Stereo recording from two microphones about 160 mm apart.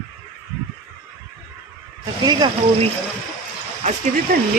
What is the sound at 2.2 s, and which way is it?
Speech, 25° right (ahead or behind).